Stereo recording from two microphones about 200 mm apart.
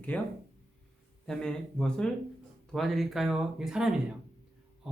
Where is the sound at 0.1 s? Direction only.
5° left (ahead or behind).